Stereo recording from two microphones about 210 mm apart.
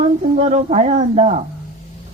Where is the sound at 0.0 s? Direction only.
30° right (ahead or behind).